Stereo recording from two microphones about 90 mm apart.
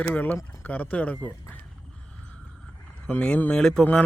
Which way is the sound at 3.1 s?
15° left (ahead or behind).